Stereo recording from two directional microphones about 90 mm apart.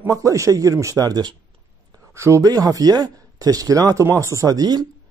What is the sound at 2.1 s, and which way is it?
Speech, 35° right (ahead or behind).